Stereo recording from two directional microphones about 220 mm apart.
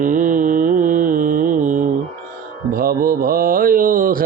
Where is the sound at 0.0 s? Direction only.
35° right (ahead or behind).